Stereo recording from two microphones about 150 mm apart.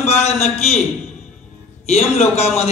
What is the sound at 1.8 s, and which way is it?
Speech, 45° left (ahead or behind).